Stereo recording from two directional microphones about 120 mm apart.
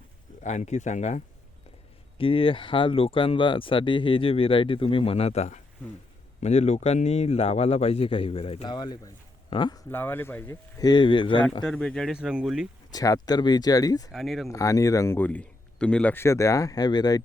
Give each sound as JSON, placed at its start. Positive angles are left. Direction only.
{"t": 0.4, "sound": "speech", "side_deg": 75}
{"t": 2.1, "sound": "a man's voice", "side_deg": 50}
{"t": 8.6, "sound": "speech", "side_deg": 35}
{"t": 9.9, "sound": "speech", "side_deg": 15}
{"t": 10.8, "sound": "speech", "side_deg": 35}
{"t": 11.6, "sound": "speech", "side_deg": 5}
{"t": 12.1, "sound": "speech", "side_deg": -10}
{"t": 12.9, "sound": "speech", "side_deg": 30}
{"t": 14.1, "sound": "speech", "side_deg": 0}
{"t": 14.5, "sound": "speech", "side_deg": 25}
{"t": 16.1, "sound": "speech", "side_deg": 25}